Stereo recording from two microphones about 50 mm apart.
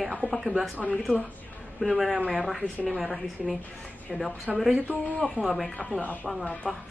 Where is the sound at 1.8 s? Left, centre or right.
Centre.